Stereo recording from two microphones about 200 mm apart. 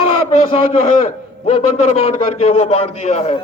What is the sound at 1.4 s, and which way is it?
A man's voice, 35° left (ahead or behind).